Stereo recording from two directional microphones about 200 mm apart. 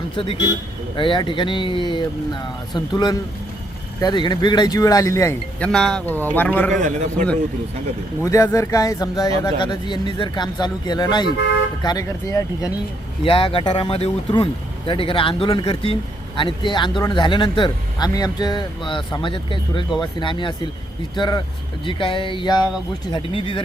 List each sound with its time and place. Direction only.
0.9 s speech: 25° left (ahead or behind); by 6.7 s 10° left (ahead or behind)
6.7 s a man's voice: 35° right (ahead or behind)
8.2 s speech: 15° left (ahead or behind)